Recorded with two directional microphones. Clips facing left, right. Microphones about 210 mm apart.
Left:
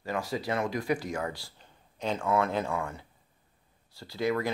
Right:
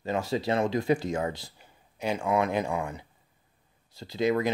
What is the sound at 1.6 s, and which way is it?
Speech, 10° right (ahead or behind).